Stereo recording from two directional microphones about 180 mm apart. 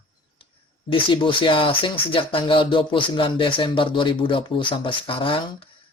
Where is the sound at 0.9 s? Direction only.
25° left (ahead or behind).